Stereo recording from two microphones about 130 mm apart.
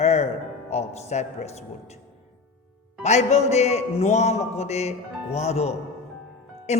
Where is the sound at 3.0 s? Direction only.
60° left (ahead or behind).